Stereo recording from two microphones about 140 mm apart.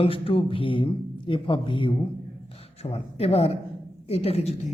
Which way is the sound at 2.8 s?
50° left (ahead or behind).